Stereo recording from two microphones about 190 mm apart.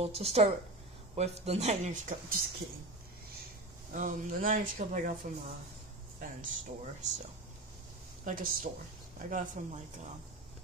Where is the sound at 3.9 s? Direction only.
45° right (ahead or behind).